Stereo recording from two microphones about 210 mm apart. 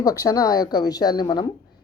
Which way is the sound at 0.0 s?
15° left (ahead or behind).